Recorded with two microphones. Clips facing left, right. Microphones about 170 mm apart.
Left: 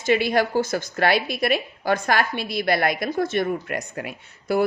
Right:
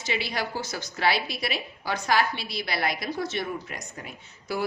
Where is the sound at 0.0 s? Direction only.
50° left (ahead or behind).